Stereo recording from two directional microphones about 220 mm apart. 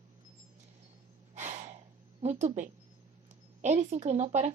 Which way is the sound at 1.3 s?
30° right (ahead or behind).